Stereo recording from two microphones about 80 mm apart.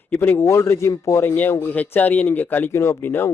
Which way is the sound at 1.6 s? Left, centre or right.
Left.